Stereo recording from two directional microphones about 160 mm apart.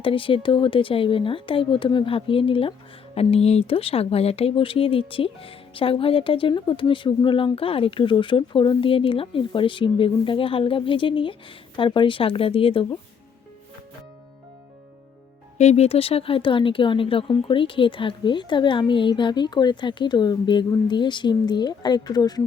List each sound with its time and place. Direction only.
0.0 s speech: 35° left (ahead or behind)
15.5 s speech: 45° left (ahead or behind); by 22.4 s 25° left (ahead or behind)